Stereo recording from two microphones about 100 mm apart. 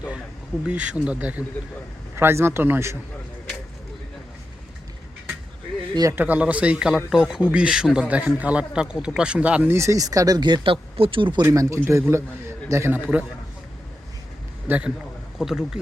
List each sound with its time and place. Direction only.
0.6 s speech: 15° right (ahead or behind)
5.9 s a man's voice: 40° right (ahead or behind)
6.1 s speech: 15° right (ahead or behind)
9.7 s speech: 30° right (ahead or behind); by 11.4 s 55° right (ahead or behind)
11.4 s a man's voice: 30° right (ahead or behind)
12.9 s speech: 15° right (ahead or behind)
14.7 s speech: 10° right (ahead or behind)